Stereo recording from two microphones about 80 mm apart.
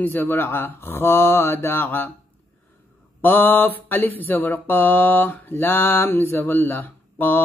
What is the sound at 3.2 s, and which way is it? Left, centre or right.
Mantra, left.